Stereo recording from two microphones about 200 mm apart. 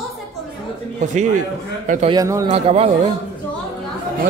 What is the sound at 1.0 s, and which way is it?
Speech, 35° right (ahead or behind).